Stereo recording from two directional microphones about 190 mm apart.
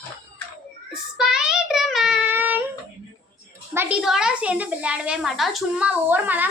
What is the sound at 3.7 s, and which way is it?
A woman's voice, 10° right (ahead or behind).